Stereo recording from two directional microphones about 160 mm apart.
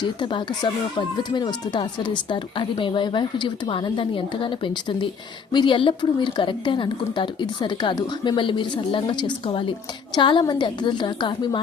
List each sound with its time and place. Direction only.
0.0 s speech: 30° left (ahead or behind)